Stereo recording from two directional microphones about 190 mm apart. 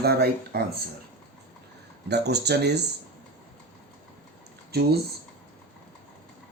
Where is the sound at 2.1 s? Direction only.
60° right (ahead or behind).